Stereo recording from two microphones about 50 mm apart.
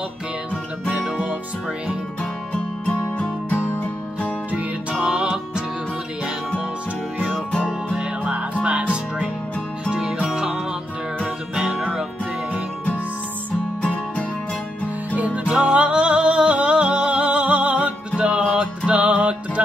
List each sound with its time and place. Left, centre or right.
0.8 s music: right
2.5 s music: left
5.0 s music: right
7.3 s music: centre
8.2 s music: right
15.1 s music: right